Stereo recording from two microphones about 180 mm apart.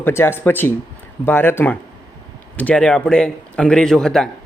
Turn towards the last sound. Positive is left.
turn(degrees=5)  # may be behind; listen again after turning